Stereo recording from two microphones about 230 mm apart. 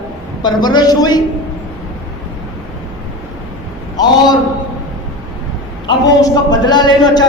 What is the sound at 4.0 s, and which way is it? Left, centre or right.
Speech, centre.